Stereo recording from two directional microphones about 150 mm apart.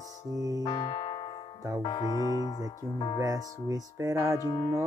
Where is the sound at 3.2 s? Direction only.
25° right (ahead or behind).